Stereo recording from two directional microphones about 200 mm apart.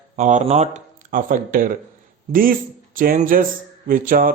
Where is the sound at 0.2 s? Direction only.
40° right (ahead or behind).